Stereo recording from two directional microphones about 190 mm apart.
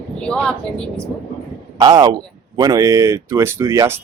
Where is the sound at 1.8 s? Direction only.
20° right (ahead or behind).